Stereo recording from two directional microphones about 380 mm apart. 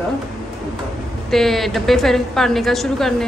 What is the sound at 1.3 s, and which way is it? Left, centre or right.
A woman's voice, centre.